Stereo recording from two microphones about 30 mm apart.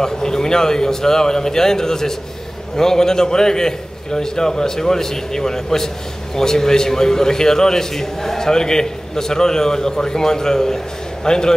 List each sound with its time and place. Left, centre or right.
0.0 s a man's voice: centre